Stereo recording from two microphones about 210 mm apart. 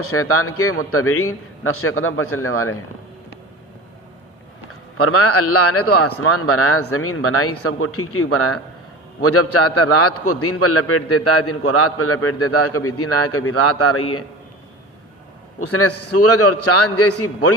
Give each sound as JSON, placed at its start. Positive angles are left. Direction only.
{"t": 0.0, "sound": "a man's voice", "side_deg": 90}
{"t": 4.9, "sound": "a man's voice", "side_deg": 90}
{"t": 15.6, "sound": "a man's voice", "side_deg": 90}